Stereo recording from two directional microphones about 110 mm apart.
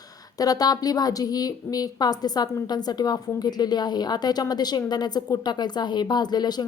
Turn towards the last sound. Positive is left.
turn(degrees=40)  # may be behind; listen again after turning